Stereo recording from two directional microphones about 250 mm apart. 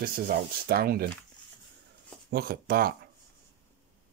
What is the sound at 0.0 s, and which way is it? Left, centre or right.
Speech, right.